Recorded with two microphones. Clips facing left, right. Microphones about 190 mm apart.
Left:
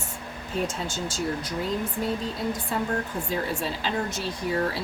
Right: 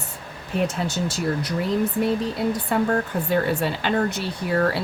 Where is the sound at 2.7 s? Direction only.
65° right (ahead or behind).